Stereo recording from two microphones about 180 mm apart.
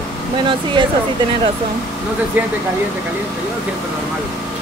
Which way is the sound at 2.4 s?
10° right (ahead or behind).